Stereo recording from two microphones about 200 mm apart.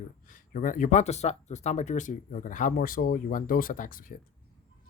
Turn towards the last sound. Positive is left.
turn(degrees=45)  # may be behind; listen again after turning